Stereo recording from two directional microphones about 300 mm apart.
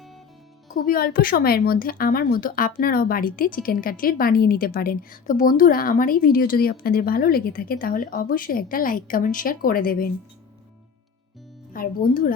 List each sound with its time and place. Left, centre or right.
0.7 s a woman's voice: left
11.7 s a woman's voice: left